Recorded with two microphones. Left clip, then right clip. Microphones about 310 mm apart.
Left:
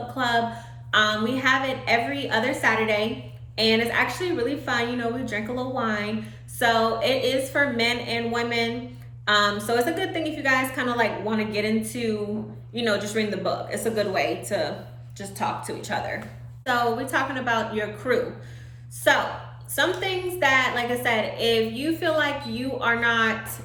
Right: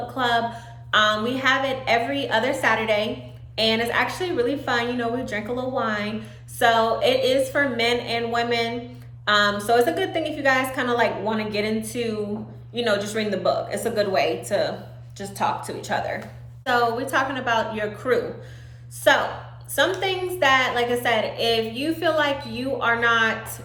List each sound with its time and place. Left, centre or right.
0.1 s a woman's voice: centre